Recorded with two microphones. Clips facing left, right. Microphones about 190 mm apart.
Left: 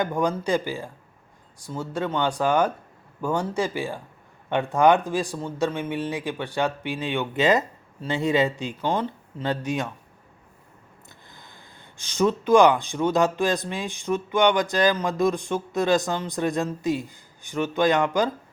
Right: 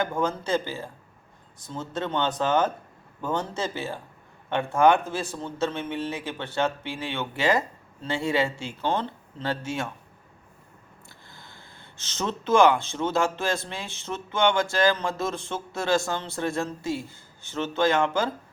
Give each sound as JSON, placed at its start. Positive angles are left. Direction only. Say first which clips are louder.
{"t": 0.0, "sound": "speech", "louder": "left 3 dB", "side_deg": 15}
{"t": 11.3, "sound": "speech", "louder": "even", "side_deg": 15}